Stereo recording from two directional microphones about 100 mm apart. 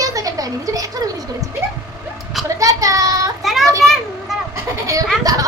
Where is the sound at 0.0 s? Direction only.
35° right (ahead or behind).